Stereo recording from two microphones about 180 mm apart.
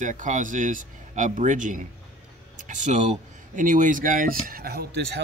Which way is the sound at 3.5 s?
45° right (ahead or behind).